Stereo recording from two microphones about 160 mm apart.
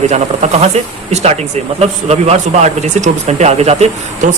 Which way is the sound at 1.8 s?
40° right (ahead or behind).